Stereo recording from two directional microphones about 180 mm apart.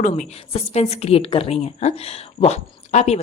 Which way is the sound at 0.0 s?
40° left (ahead or behind).